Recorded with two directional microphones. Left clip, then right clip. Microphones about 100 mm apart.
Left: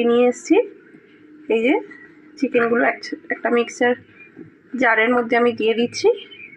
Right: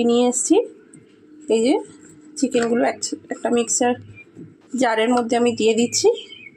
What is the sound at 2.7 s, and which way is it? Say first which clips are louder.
Speech: left 2 dB; 40° right (ahead or behind).